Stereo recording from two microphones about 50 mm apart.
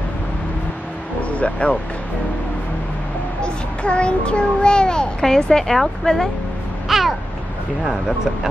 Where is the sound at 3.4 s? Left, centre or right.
Left; by 6.3 s centre.